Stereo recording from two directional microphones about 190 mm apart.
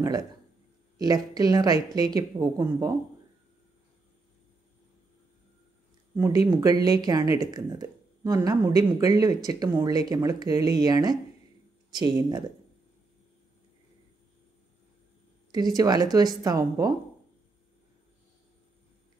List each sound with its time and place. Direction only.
0.0 s a man's voice: 20° right (ahead or behind)
6.1 s speech: 15° right (ahead or behind)
15.5 s speech: 20° right (ahead or behind)